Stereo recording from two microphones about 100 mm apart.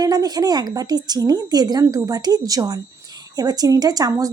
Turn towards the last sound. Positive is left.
turn(degrees=-40)  # may be behind; listen again after turning